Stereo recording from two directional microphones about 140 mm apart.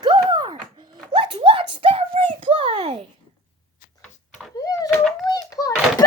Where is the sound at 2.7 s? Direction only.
45° right (ahead or behind).